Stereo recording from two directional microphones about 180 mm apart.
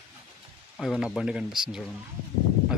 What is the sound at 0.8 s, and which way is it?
Speech, centre (ahead or behind).